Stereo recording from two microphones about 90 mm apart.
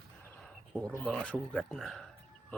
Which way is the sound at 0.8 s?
5° left (ahead or behind).